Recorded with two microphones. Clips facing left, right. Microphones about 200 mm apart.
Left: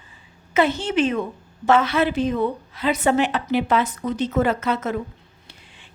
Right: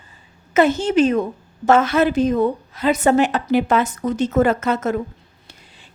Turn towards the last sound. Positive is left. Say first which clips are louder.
# right 4 dB
turn(degrees=-45)  # may be behind; listen again after turning